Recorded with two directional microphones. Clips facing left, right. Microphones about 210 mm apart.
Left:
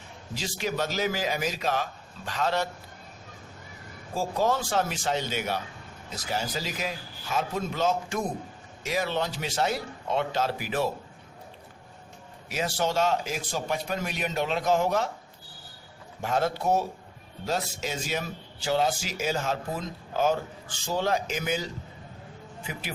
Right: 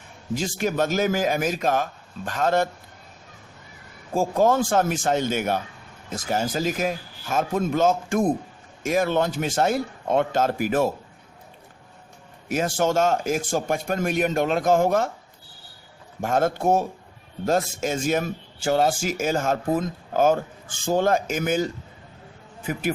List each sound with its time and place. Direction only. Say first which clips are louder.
0.3 s speech: right 6 dB; 50° right (ahead or behind)
4.1 s speech: right 6 dB; 50° right (ahead or behind)
12.5 s speech: right 6 dB; 50° right (ahead or behind)
16.2 s a man's voice: right 5 dB; 50° right (ahead or behind)